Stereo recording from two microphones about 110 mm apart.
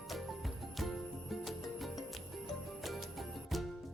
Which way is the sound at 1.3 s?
Centre (ahead or behind).